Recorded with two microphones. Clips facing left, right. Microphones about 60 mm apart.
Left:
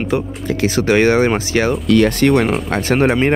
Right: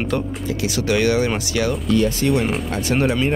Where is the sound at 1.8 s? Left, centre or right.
Left.